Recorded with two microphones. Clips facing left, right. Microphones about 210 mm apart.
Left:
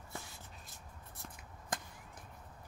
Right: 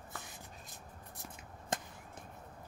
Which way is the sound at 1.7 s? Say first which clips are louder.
Right 3 dB; 25° right (ahead or behind).